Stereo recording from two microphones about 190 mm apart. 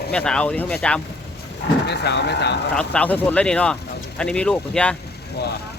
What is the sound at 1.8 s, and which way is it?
Speech, 60° left (ahead or behind).